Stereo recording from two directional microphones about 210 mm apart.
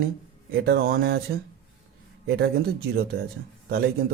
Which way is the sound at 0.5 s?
50° right (ahead or behind).